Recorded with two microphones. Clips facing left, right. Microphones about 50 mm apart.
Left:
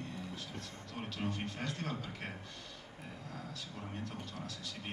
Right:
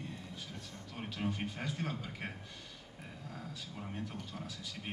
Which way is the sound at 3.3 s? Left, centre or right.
Centre.